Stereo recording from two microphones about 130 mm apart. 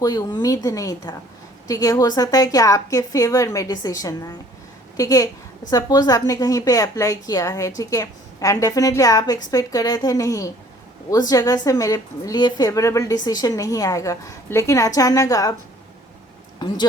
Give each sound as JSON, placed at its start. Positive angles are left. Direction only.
{"t": 0.0, "sound": "a woman's voice", "side_deg": 30}
{"t": 16.6, "sound": "speech", "side_deg": 35}